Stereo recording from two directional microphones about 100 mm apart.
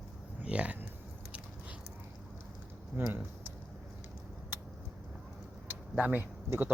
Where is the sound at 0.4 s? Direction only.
10° right (ahead or behind).